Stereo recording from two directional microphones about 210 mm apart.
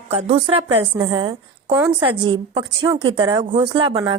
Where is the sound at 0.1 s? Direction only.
30° right (ahead or behind).